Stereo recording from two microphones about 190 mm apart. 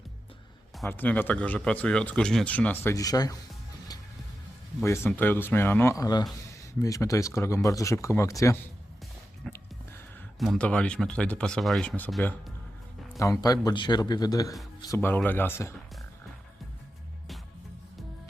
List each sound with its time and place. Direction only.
0.8 s speech: 10° left (ahead or behind)
4.8 s speech: 15° left (ahead or behind)
10.4 s speech: 5° left (ahead or behind)
13.1 s a man's voice: 15° left (ahead or behind)